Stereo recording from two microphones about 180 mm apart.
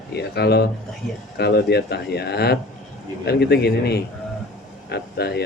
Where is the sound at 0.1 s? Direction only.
65° left (ahead or behind).